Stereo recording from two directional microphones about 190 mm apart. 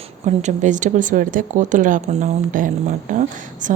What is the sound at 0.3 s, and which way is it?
Speech, 40° right (ahead or behind).